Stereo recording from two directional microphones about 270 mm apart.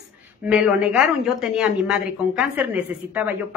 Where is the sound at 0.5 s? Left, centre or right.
Centre.